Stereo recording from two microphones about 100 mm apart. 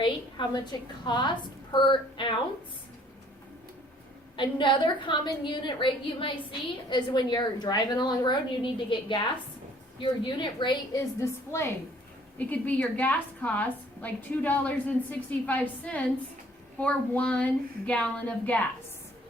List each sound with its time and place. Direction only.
0.0 s a woman's voice: 50° left (ahead or behind)
4.4 s a woman's voice: 55° left (ahead or behind)
10.9 s a woman's voice: 30° left (ahead or behind)
12.5 s a woman's voice: 15° left (ahead or behind)